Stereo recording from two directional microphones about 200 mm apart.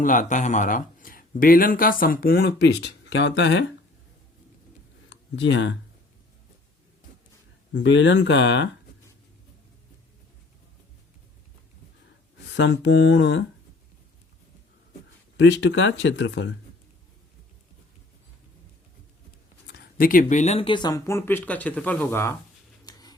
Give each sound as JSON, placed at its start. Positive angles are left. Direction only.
{"t": 0.0, "sound": "speech", "side_deg": 40}
{"t": 5.0, "sound": "a sound", "side_deg": 60}
{"t": 7.7, "sound": "speech", "side_deg": 65}
{"t": 12.5, "sound": "speech", "side_deg": 65}
{"t": 15.4, "sound": "speech", "side_deg": 65}
{"t": 19.7, "sound": "speech", "side_deg": 50}
{"t": 22.9, "sound": "a sound", "side_deg": 20}